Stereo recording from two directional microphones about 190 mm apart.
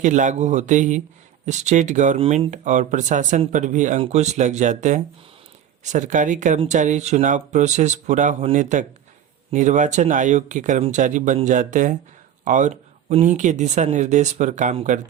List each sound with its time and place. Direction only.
0.0 s speech: 40° right (ahead or behind)